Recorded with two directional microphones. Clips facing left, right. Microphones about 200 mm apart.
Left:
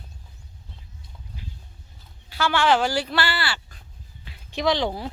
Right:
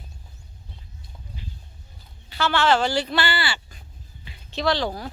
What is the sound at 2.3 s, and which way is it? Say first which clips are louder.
Speech: even; 10° left (ahead or behind).